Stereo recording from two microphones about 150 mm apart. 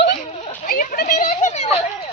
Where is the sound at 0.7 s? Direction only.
85° left; by 1.8 s 50° left (ahead or behind).